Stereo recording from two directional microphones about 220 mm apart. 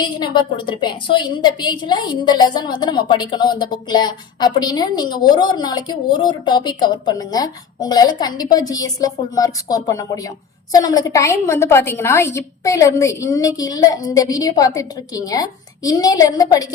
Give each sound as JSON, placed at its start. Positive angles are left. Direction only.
{"t": 0.0, "sound": "a woman's voice", "side_deg": 20}